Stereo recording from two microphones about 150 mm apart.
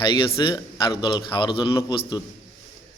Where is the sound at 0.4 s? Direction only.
30° left (ahead or behind).